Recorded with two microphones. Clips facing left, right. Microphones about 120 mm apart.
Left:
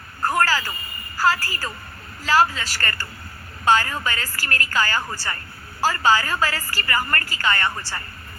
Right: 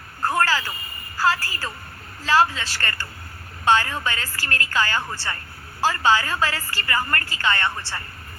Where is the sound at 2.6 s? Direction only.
25° right (ahead or behind).